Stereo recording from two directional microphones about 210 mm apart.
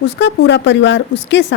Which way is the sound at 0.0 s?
55° left (ahead or behind).